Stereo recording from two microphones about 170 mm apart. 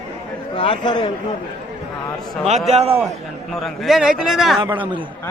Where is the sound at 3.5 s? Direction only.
Centre (ahead or behind).